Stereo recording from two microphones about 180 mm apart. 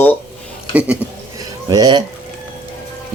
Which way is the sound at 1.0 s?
5° right (ahead or behind).